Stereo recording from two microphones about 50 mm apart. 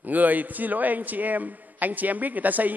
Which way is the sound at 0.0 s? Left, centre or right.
Right.